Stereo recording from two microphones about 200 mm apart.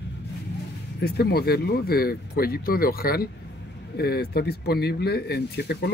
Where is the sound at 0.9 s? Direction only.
55° left (ahead or behind).